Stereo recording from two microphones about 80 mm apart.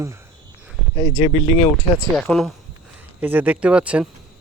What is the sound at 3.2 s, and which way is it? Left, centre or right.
Speech, centre.